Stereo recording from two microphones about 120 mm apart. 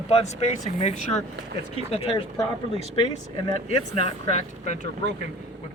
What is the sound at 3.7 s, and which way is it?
Speech, 65° left (ahead or behind).